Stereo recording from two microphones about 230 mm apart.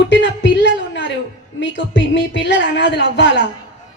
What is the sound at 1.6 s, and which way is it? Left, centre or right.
Speech, left.